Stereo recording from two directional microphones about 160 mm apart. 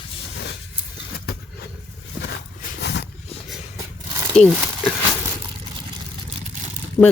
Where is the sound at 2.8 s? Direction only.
90° left.